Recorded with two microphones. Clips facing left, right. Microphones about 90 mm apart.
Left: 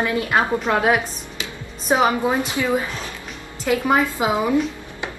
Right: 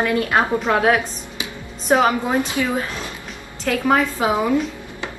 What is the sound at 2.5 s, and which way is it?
A woman's voice, 15° left (ahead or behind).